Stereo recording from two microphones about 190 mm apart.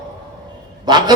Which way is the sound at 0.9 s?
20° right (ahead or behind).